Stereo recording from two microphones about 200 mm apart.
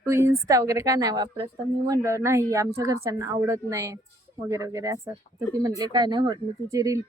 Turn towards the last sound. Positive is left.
turn(degrees=-15)  # may be behind; listen again after turning